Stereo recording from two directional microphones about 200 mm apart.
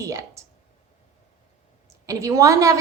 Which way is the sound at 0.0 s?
15° right (ahead or behind).